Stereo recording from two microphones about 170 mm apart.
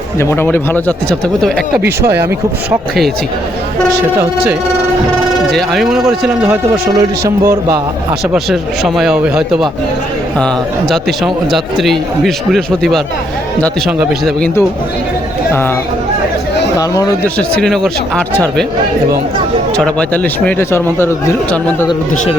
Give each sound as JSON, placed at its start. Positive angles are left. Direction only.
{"t": 0.2, "sound": "a man's voice", "side_deg": 15}
{"t": 1.8, "sound": "speech", "side_deg": -15}
{"t": 5.5, "sound": "a man's voice", "side_deg": 0}
{"t": 6.5, "sound": "speech", "side_deg": -15}
{"t": 8.3, "sound": "a man's voice", "side_deg": 0}
{"t": 16.7, "sound": "speech", "side_deg": 20}
{"t": 17.3, "sound": "a man's voice", "side_deg": 5}
{"t": 19.7, "sound": "speech", "side_deg": 5}